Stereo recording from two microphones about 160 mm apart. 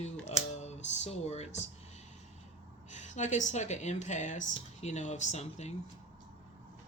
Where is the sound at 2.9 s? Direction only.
50° left (ahead or behind).